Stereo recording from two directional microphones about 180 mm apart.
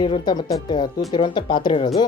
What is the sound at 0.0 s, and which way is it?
Speech, 25° left (ahead or behind).